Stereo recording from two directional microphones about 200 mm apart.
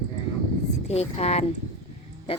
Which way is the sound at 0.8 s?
30° left (ahead or behind).